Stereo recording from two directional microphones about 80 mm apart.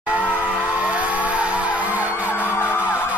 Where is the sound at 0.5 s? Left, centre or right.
Centre.